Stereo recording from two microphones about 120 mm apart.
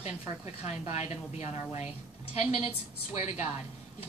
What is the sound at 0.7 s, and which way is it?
Speech, 65° left (ahead or behind).